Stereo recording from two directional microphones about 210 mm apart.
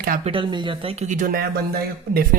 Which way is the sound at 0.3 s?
25° right (ahead or behind).